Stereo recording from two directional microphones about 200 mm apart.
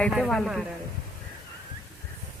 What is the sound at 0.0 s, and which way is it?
Speech, centre (ahead or behind).